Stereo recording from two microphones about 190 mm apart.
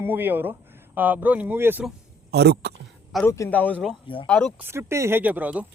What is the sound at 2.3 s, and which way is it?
Speech, 60° right (ahead or behind).